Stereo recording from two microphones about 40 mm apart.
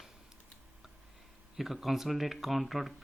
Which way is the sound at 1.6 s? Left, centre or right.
Centre.